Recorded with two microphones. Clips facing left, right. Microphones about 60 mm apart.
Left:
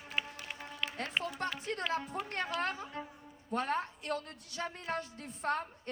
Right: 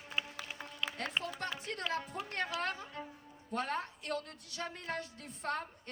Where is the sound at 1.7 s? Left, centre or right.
Left.